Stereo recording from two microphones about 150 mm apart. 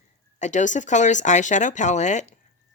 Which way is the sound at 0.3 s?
55° left (ahead or behind).